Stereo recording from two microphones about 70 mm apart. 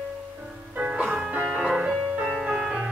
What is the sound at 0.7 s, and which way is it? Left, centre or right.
Music, centre.